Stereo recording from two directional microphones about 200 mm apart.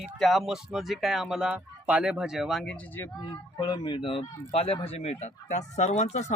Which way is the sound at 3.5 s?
20° left (ahead or behind).